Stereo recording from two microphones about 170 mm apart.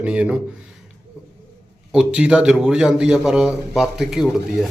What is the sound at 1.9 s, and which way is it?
A man's voice, 5° right (ahead or behind).